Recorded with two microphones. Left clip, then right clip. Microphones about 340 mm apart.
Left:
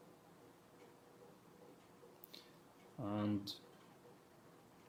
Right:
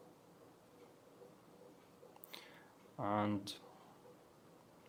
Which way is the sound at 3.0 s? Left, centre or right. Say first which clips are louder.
Right 4 dB; centre.